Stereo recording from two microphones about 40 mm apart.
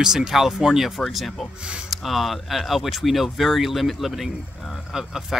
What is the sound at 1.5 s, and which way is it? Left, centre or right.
Speech, right.